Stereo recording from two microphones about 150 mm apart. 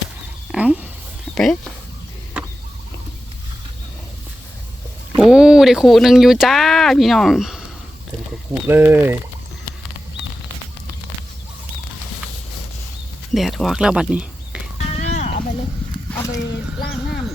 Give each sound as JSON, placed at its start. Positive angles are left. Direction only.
{"t": 0.5, "sound": "speech", "side_deg": -5}
{"t": 5.1, "sound": "speech", "side_deg": 0}
{"t": 8.6, "sound": "speech", "side_deg": -15}
{"t": 13.3, "sound": "speech", "side_deg": 0}
{"t": 14.9, "sound": "a sound", "side_deg": 50}